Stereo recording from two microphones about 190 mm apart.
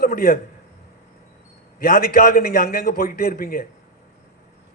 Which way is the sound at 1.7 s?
50° left (ahead or behind).